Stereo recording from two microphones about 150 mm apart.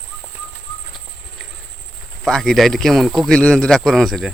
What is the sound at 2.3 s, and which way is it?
Speech, 5° left (ahead or behind).